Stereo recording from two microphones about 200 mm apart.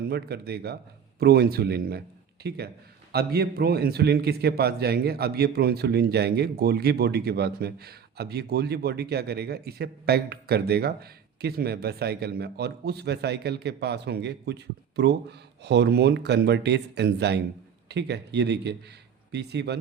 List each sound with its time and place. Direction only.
0.1 s a man's voice: 50° right (ahead or behind)